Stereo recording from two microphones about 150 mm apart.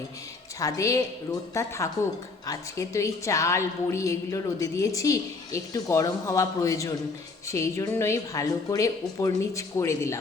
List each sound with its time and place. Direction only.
0.6 s a woman's voice: 20° left (ahead or behind)